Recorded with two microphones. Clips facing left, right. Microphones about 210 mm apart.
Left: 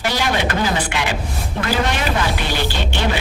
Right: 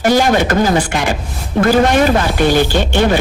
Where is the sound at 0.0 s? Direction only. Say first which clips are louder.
Right 8 dB; 45° right (ahead or behind).